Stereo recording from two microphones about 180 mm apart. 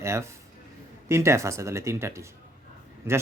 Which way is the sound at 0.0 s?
15° right (ahead or behind).